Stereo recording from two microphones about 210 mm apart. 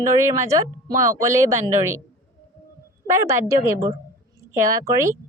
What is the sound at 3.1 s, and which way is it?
A woman's voice, 15° right (ahead or behind).